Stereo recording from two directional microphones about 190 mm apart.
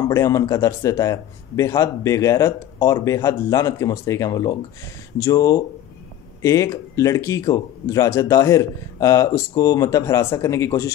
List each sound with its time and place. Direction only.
0.1 s a man's voice: 15° left (ahead or behind)